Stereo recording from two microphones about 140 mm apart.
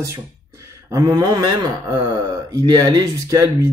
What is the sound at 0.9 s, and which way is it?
Speech, 25° right (ahead or behind).